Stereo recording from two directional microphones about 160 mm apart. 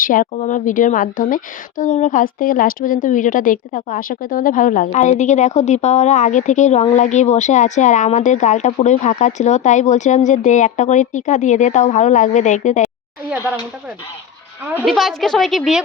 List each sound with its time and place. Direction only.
0.0 s a woman's voice: 60° left (ahead or behind)
14.8 s a woman's voice: centre (ahead or behind)